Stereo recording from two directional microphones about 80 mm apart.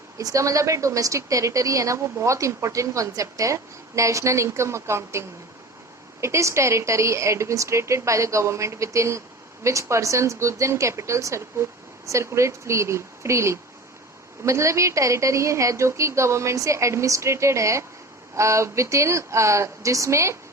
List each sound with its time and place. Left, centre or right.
0.2 s a woman's voice: right